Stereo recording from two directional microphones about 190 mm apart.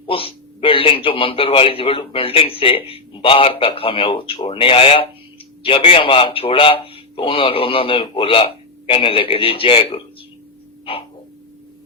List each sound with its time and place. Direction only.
0.1 s a man's voice: 30° left (ahead or behind)